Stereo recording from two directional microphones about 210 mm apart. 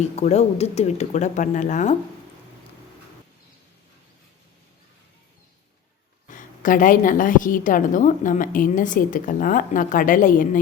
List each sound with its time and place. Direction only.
0.0 s a woman's voice: 30° left (ahead or behind)
6.3 s a woman's voice: 40° left (ahead or behind)